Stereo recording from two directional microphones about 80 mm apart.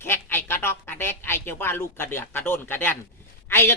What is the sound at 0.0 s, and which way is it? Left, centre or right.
A woman's voice, left.